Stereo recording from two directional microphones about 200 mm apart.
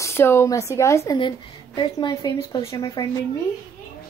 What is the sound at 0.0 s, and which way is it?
A woman's voice, 10° left (ahead or behind).